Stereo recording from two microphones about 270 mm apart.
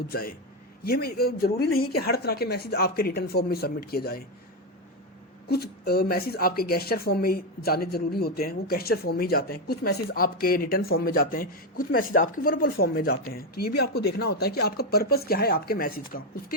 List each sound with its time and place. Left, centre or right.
0.1 s speech: left
5.5 s speech: left